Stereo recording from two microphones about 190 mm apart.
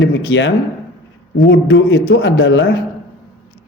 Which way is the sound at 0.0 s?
70° left (ahead or behind).